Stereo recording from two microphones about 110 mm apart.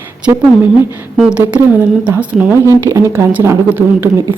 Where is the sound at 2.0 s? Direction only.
15° right (ahead or behind).